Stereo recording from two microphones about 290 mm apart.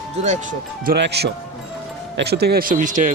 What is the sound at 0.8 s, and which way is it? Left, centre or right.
Speech, right.